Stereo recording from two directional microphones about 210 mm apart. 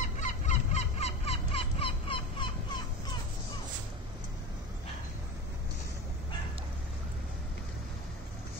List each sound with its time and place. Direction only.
0.2 s fowl: 35° left (ahead or behind)